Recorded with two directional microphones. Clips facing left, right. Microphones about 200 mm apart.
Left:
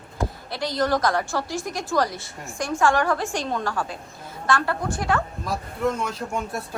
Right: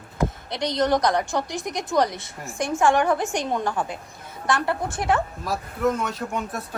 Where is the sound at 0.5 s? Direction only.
20° right (ahead or behind).